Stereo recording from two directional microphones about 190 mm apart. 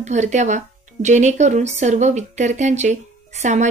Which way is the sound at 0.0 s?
40° right (ahead or behind).